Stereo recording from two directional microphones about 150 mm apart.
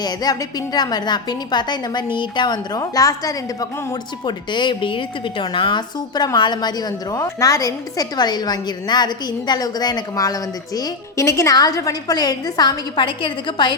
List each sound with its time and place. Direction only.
0.0 s a woman's voice: 25° left (ahead or behind)